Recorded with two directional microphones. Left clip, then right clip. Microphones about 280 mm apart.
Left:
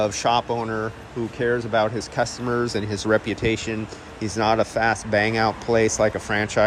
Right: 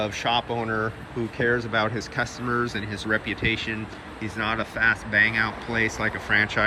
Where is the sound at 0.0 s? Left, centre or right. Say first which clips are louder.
Left 4 dB; centre.